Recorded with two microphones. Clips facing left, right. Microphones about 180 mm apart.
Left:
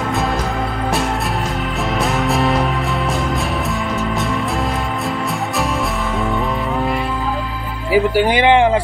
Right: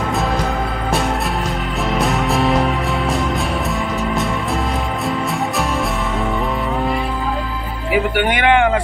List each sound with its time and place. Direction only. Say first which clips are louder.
2.0 s music: even; centre (ahead or behind)
7.9 s speech: left 3 dB; 30° left (ahead or behind)